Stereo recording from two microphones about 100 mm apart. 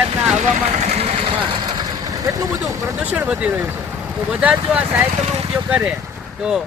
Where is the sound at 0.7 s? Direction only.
90° right; by 2.5 s 35° right (ahead or behind).